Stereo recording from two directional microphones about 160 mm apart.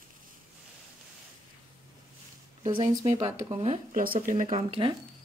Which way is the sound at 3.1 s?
45° right (ahead or behind).